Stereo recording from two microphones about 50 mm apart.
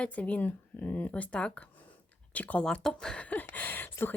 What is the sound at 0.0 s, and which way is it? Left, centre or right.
Speech, left.